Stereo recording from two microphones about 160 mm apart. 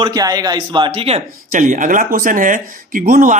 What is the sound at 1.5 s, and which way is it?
Speech, 55° right (ahead or behind).